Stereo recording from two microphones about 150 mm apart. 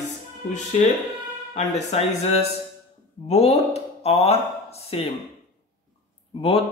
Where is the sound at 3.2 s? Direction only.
45° left (ahead or behind).